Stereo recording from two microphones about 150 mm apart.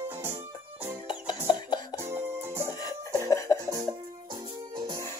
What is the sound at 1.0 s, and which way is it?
Music, 30° left (ahead or behind).